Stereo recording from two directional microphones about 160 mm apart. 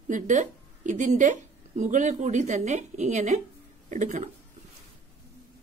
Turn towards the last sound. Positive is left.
turn(degrees=-50)  # may be behind; listen again after turning